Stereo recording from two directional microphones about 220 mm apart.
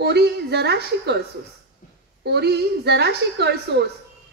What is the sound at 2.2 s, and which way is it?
A woman's voice, 50° right (ahead or behind).